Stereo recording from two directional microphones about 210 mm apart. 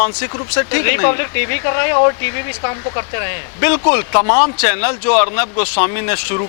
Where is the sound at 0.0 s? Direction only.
15° left (ahead or behind).